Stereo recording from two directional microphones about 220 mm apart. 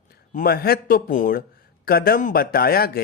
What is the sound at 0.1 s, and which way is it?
Speech, 45° left (ahead or behind).